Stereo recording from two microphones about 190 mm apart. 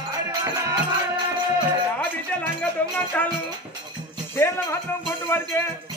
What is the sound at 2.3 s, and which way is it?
Music, 10° left (ahead or behind).